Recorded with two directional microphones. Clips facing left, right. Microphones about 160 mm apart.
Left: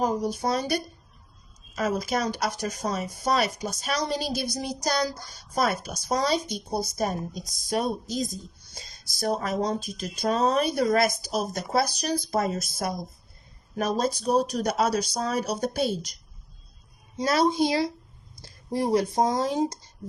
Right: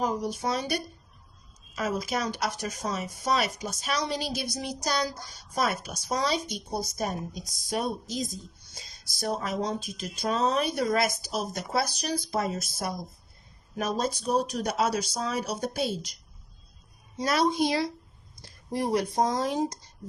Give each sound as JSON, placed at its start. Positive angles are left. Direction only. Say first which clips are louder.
{"t": 0.0, "sound": "speech", "louder": "left 3 dB", "side_deg": 35}
{"t": 17.2, "sound": "speech", "louder": "left 2 dB", "side_deg": 25}
{"t": 18.4, "sound": "a sound", "louder": "left 2 dB", "side_deg": 5}
{"t": 18.7, "sound": "speech", "louder": "left 3 dB", "side_deg": 30}